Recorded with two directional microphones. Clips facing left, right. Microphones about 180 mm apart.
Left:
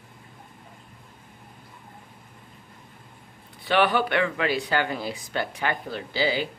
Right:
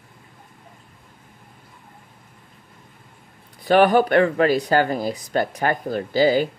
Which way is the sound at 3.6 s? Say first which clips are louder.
Right 7 dB; 45° right (ahead or behind).